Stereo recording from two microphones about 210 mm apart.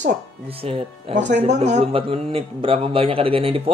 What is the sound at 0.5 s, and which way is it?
Speech, 30° right (ahead or behind).